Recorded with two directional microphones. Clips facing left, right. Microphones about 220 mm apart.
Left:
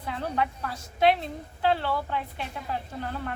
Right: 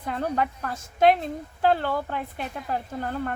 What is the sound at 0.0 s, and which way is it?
A woman's voice, 50° right (ahead or behind).